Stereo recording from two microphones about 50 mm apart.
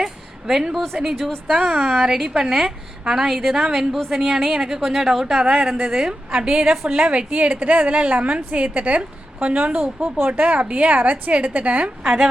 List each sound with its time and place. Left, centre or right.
0.0 s a sound: centre
1.5 s a woman's voice: centre
5.4 s a woman's voice: right